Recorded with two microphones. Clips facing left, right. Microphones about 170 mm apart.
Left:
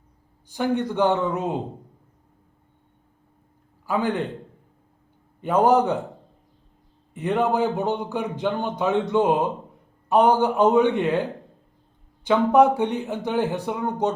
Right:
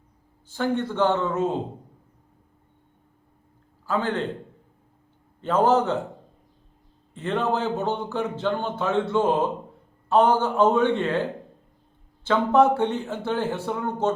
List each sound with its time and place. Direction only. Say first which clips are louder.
0.4 s speech: left 2 dB; 15° left (ahead or behind)
3.8 s speech: left 2 dB; 15° left (ahead or behind)
5.4 s speech: left 2 dB; 15° left (ahead or behind)
7.1 s speech: left 3 dB; 15° left (ahead or behind)